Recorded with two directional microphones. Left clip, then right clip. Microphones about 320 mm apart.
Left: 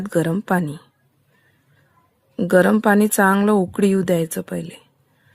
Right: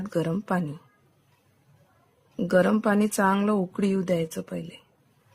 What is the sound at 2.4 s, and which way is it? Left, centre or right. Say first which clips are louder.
A woman's voice: left 7 dB; left.